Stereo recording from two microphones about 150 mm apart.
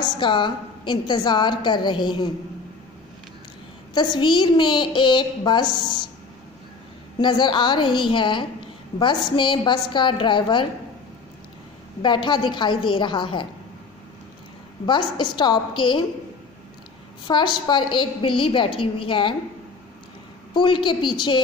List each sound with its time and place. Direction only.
0.2 s a woman's voice: 30° left (ahead or behind)
3.9 s a woman's voice: 30° left (ahead or behind)
7.2 s a woman's voice: 30° left (ahead or behind)
12.0 s a woman's voice: 30° left (ahead or behind)
14.9 s a woman's voice: 30° left (ahead or behind)
17.3 s a woman's voice: 30° left (ahead or behind)
20.5 s a woman's voice: 30° left (ahead or behind)